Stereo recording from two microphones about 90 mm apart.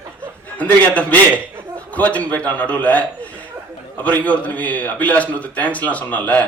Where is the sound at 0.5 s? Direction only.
15° left (ahead or behind).